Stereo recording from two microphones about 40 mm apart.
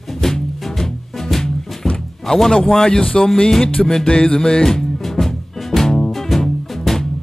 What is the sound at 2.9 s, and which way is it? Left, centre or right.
Music, left.